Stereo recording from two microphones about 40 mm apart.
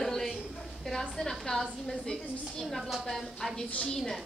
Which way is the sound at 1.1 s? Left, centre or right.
Centre.